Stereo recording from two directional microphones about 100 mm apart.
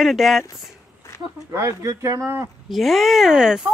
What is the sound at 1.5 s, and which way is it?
Speech, 30° right (ahead or behind).